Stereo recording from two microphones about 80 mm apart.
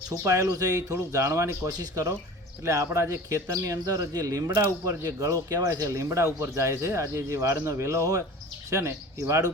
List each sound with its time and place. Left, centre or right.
0.3 s speech: right
1.6 s speech: right